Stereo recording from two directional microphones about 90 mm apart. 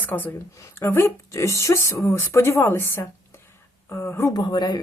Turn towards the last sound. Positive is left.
turn(degrees=55)  # may be behind; listen again after turning